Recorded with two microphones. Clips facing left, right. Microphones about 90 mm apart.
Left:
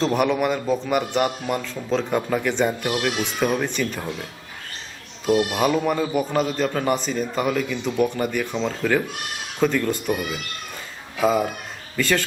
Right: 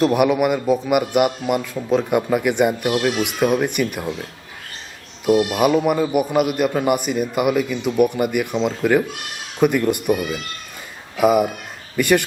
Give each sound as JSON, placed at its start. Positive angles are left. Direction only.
{"t": 0.0, "sound": "a man's voice", "side_deg": -10}
{"t": 5.2, "sound": "a man's voice", "side_deg": -10}